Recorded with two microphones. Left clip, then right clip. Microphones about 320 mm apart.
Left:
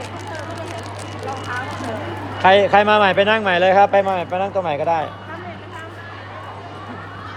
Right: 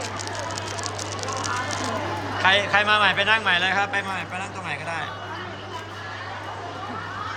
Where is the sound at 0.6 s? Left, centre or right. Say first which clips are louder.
Even; left.